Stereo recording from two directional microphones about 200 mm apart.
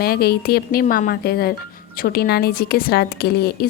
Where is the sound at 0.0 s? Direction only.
50° left (ahead or behind).